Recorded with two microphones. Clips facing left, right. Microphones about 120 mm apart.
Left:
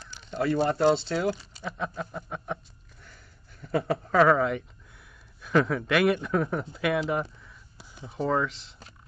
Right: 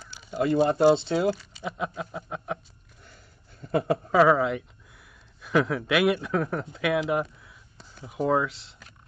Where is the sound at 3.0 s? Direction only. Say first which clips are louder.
Right 1 dB; 25° right (ahead or behind).